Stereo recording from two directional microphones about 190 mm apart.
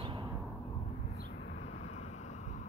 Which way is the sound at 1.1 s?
55° left (ahead or behind).